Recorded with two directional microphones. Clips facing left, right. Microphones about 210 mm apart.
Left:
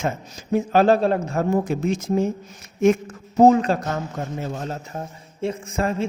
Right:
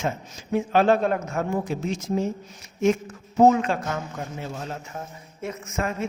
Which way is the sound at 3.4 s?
35° left (ahead or behind).